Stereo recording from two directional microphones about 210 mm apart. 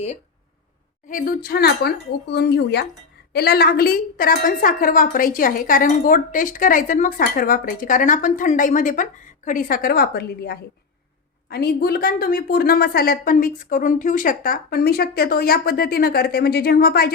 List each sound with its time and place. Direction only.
1.0 s a woman's voice: 40° left (ahead or behind)